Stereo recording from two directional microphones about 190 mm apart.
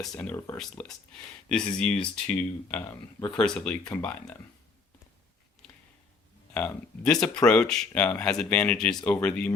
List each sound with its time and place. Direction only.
0.0 s speech: 5° left (ahead or behind)
2.8 s speech: 15° left (ahead or behind)
3.3 s speech: 5° left (ahead or behind)
6.5 s speech: 10° left (ahead or behind)